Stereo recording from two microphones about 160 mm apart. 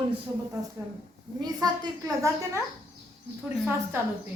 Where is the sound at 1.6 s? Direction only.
20° right (ahead or behind).